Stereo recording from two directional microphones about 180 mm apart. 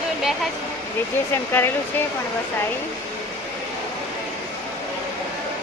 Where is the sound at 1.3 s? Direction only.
10° left (ahead or behind).